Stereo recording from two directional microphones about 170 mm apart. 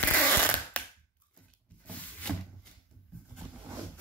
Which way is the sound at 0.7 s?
10° left (ahead or behind).